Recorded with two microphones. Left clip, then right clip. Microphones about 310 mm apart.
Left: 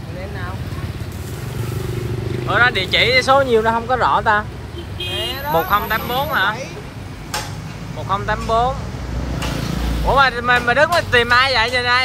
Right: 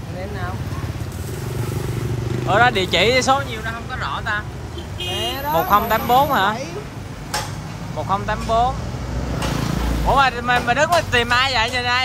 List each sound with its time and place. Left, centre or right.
2.4 s speech: centre
3.3 s speech: centre
5.2 s vehicle: right
5.7 s speech: centre
8.1 s speech: centre
10.0 s speech: centre